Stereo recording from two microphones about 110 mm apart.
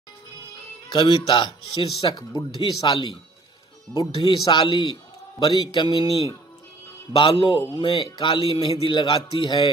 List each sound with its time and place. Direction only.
0.9 s speech: 50° left (ahead or behind)
7.1 s speech: 50° left (ahead or behind)